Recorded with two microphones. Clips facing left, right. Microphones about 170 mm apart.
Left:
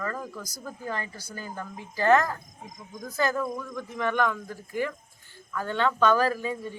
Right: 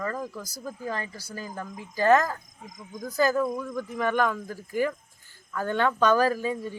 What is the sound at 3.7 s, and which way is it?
Speech, 40° right (ahead or behind).